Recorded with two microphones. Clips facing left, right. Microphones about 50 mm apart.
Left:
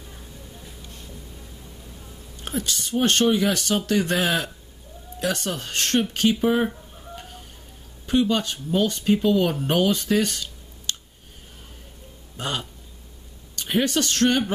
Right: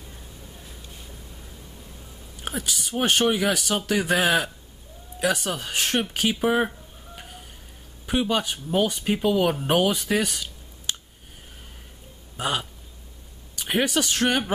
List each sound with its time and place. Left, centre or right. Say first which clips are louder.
2.4 s speech: left 2 dB; centre
7.2 s a sound: right 1 dB; centre
8.1 s speech: left 2 dB; centre
12.4 s speech: right 2 dB; centre